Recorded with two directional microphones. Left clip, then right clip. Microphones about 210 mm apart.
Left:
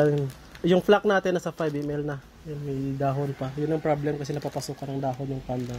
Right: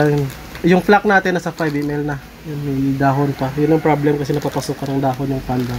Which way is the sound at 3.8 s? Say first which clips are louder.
Right 10 dB; 50° left (ahead or behind).